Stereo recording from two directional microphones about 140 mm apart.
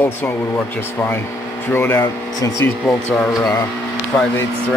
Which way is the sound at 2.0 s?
25° left (ahead or behind).